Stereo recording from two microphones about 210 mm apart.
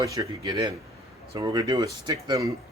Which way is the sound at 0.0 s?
20° right (ahead or behind).